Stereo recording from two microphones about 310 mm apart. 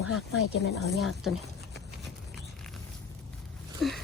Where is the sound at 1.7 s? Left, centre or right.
Centre.